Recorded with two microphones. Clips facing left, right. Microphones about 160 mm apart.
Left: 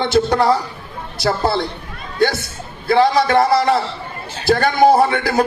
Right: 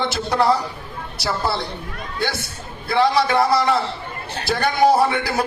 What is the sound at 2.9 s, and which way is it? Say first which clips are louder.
Speech: left 4 dB; 50° left (ahead or behind).